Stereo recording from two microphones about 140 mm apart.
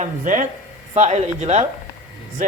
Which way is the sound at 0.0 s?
65° right (ahead or behind).